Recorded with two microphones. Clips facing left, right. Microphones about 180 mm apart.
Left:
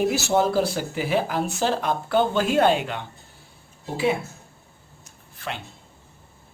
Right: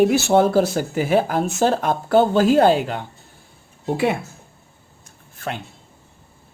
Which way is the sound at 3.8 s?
60° right (ahead or behind).